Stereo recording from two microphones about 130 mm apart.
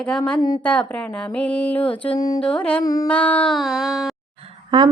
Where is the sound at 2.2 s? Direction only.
30° left (ahead or behind).